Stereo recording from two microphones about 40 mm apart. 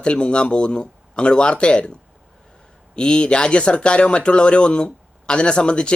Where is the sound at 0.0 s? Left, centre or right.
Left.